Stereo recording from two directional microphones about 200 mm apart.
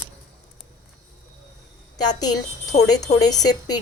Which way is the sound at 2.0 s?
20° left (ahead or behind).